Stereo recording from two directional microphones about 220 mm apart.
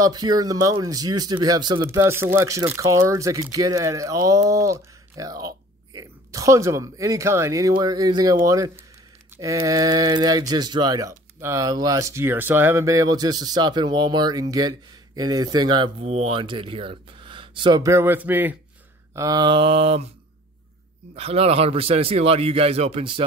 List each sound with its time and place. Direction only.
0.0 s speech: 20° right (ahead or behind)
21.1 s speech: 30° right (ahead or behind)